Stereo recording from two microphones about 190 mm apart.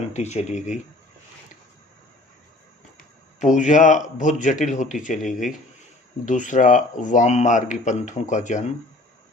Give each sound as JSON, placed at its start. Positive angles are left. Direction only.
{"t": 0.1, "sound": "speech", "side_deg": 35}
{"t": 3.4, "sound": "speech", "side_deg": 40}